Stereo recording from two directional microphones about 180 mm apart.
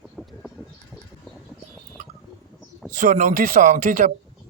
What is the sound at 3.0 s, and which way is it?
A man's voice, 45° right (ahead or behind).